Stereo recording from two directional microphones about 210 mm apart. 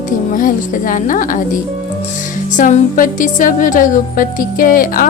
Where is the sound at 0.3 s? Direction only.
40° left (ahead or behind).